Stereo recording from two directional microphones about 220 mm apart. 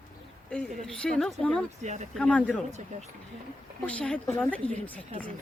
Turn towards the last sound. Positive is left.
turn(degrees=5)  # may be behind; listen again after turning